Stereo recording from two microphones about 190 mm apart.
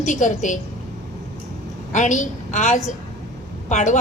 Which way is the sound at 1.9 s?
40° left (ahead or behind).